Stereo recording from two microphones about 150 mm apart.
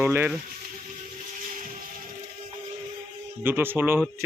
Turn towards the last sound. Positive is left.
turn(degrees=-15)  # may be behind; listen again after turning